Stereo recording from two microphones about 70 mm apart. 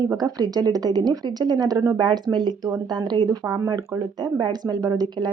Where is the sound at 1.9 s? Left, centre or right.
Right.